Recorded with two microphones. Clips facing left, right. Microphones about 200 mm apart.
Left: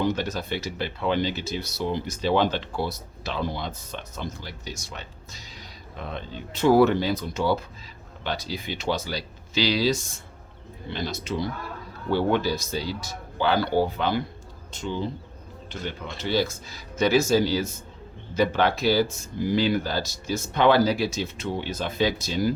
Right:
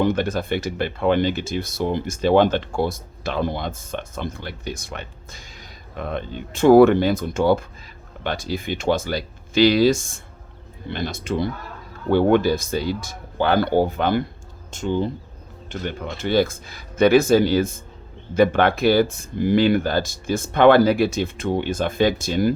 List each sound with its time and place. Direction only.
0.0 s speech: 55° right (ahead or behind)